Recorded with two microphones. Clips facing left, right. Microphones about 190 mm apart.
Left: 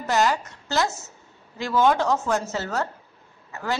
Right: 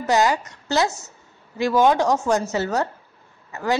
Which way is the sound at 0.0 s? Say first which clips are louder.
Right 3 dB; 15° right (ahead or behind).